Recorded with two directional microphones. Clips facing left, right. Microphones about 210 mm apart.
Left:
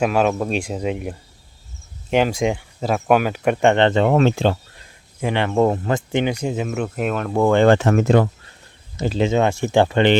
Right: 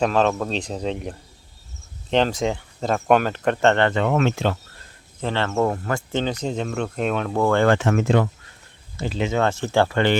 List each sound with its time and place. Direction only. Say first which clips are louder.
0.0 s speech: left 2 dB; 10° left (ahead or behind)
3.8 s speech: left 4 dB; 30° left (ahead or behind)
5.2 s speech: left 4 dB; 15° left (ahead or behind)
7.3 s speech: left 4 dB; 20° left (ahead or behind)
7.7 s speech: left 4 dB; 35° left (ahead or behind)
9.4 s speech: left 1 dB; 15° left (ahead or behind)